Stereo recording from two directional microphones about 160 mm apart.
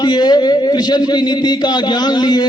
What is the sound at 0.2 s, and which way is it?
Speech, 25° left (ahead or behind).